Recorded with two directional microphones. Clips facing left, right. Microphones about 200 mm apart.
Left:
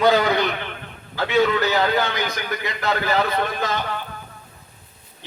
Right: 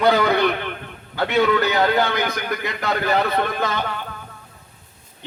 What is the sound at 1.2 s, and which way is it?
A man's voice, 60° right (ahead or behind).